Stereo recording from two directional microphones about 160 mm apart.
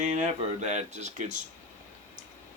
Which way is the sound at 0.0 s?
45° right (ahead or behind).